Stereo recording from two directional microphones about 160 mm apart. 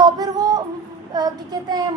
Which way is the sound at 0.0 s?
25° right (ahead or behind).